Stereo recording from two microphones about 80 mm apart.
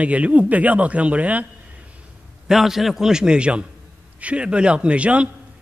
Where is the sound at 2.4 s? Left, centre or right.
Centre.